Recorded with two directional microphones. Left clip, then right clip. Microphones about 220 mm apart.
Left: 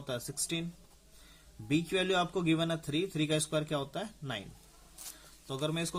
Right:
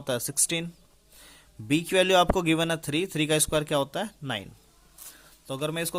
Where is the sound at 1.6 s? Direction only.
40° right (ahead or behind).